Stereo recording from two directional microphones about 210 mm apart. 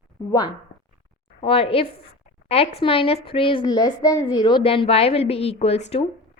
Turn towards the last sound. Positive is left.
turn(degrees=30)  # may be behind; listen again after turning